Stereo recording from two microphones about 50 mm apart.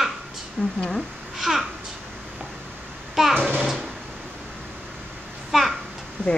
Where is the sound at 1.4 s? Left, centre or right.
Centre.